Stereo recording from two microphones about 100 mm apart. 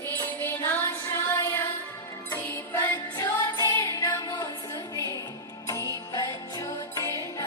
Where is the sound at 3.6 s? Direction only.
35° left (ahead or behind).